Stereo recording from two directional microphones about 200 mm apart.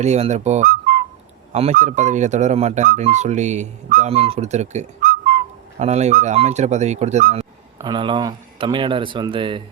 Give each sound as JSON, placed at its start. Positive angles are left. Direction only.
{"t": 0.0, "sound": "speech", "side_deg": -35}
{"t": 7.8, "sound": "speech", "side_deg": -20}